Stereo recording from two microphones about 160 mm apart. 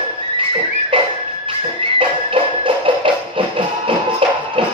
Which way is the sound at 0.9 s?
35° right (ahead or behind).